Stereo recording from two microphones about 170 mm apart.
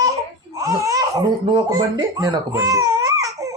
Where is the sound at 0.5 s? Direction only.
20° right (ahead or behind).